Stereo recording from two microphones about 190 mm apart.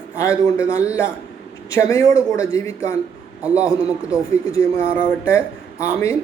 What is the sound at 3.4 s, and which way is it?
Speech, 5° right (ahead or behind).